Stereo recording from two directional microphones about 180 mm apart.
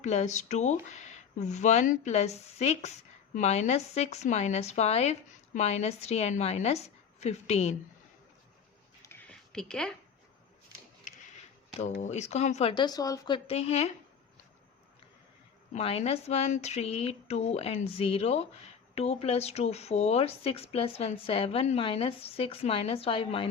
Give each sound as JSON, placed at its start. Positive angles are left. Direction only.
{"t": 0.0, "sound": "speech", "side_deg": 40}
{"t": 9.0, "sound": "a sound", "side_deg": 10}
{"t": 11.0, "sound": "a sound", "side_deg": 40}
{"t": 12.0, "sound": "speech", "side_deg": 40}
{"t": 12.7, "sound": "speech", "side_deg": 20}
{"t": 15.7, "sound": "speech", "side_deg": 35}